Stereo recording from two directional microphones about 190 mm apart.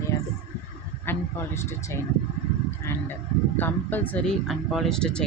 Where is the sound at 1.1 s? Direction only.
15° left (ahead or behind).